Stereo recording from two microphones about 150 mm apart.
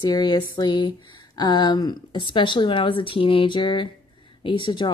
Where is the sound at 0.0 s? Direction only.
30° left (ahead or behind).